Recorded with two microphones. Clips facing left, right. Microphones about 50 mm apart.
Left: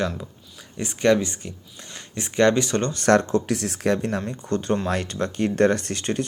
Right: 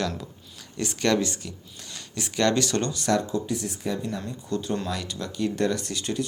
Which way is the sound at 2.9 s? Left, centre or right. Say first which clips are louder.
Left 6 dB; left.